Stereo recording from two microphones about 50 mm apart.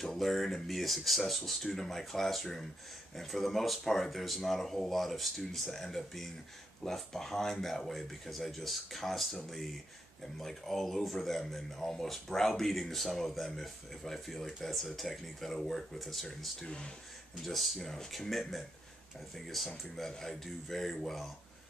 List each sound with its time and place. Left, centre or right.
0.0 s speech: centre
16.6 s speech: centre
17.4 s speech: centre